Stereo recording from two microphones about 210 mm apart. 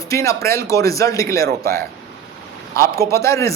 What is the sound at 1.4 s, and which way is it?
Speech, 45° right (ahead or behind).